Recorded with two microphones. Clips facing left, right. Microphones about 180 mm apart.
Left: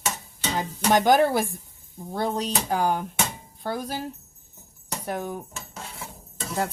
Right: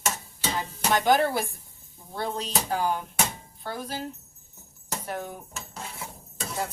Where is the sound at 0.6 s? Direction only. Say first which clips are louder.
Left 5 dB; 45° left (ahead or behind).